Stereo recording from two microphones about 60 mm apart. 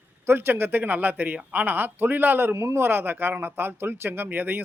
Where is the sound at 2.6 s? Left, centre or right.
Right.